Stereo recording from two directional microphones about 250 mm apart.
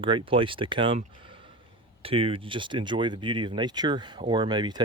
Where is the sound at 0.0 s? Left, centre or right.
Centre.